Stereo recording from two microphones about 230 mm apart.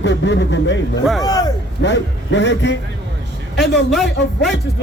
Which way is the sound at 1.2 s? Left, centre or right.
Centre.